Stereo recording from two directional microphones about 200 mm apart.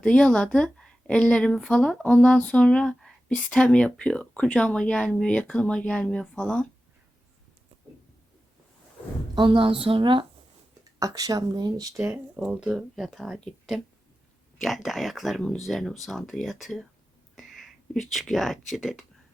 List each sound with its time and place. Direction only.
0.0 s a woman's voice: 5° left (ahead or behind)
9.3 s a woman's voice: 25° right (ahead or behind); by 19.0 s centre (ahead or behind)